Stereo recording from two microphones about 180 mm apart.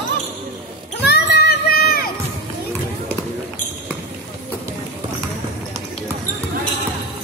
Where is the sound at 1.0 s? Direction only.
65° left (ahead or behind).